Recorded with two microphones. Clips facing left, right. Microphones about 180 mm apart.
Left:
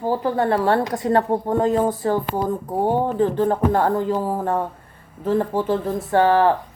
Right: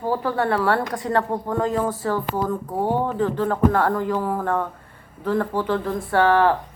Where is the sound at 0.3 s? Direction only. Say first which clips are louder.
Left 2 dB; 20° left (ahead or behind).